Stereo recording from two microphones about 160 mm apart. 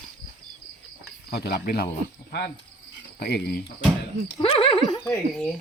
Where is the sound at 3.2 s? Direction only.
85° left.